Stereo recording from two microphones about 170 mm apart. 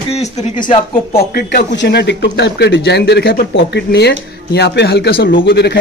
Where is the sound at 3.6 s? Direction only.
80° left.